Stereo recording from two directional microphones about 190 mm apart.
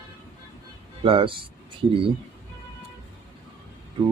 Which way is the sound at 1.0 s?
30° right (ahead or behind).